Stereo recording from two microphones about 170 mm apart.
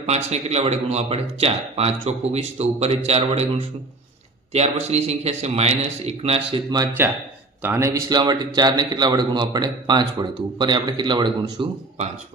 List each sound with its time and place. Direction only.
0.0 s speech: 40° right (ahead or behind)
7.0 s a man's voice: 15° right (ahead or behind)